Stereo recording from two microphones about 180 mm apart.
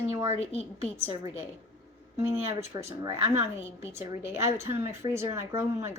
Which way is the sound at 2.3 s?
20° right (ahead or behind).